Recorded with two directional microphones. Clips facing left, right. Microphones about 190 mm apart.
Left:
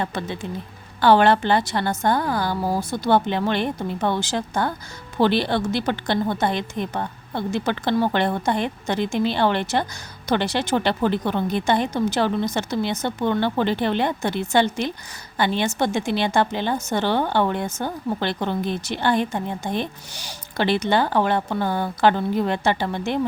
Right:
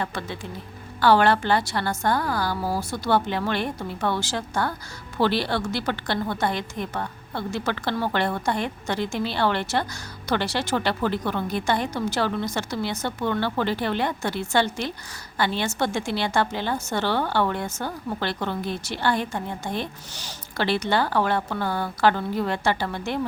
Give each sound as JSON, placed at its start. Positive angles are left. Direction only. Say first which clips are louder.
{"t": 0.0, "sound": "a woman's voice", "louder": "left 3 dB", "side_deg": 20}